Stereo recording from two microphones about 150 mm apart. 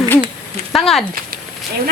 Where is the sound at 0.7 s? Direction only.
Centre (ahead or behind).